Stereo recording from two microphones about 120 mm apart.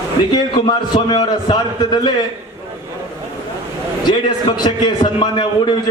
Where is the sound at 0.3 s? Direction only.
35° left (ahead or behind).